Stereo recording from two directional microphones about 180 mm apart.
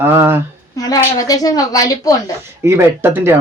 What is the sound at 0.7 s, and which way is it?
A woman's voice, 20° left (ahead or behind).